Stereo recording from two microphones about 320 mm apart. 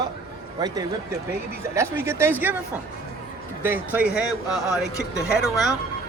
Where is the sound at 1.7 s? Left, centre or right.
Centre.